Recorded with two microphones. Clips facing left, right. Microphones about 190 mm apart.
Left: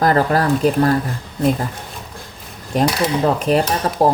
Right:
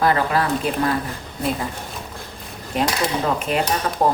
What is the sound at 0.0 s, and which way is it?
Speech, 45° left (ahead or behind).